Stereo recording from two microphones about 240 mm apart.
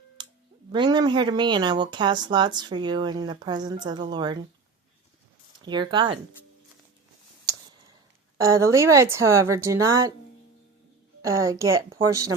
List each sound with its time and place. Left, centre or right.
0.2 s a sound: centre
0.7 s speech: centre
5.6 s speech: centre
8.4 s speech: centre
11.2 s speech: centre